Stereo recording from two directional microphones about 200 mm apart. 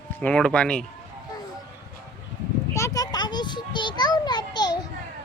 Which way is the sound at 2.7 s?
15° left (ahead or behind).